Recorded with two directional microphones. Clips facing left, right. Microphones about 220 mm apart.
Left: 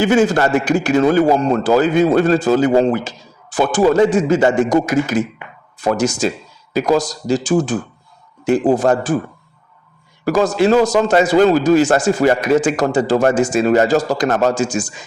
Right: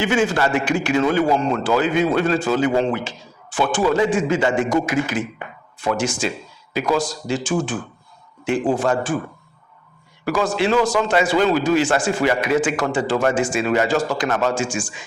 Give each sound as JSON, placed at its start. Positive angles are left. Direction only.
{"t": 0.0, "sound": "a man's voice", "side_deg": 40}
{"t": 10.2, "sound": "a man's voice", "side_deg": 40}